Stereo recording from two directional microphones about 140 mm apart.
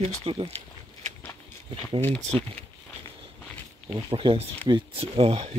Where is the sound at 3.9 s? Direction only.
35° right (ahead or behind).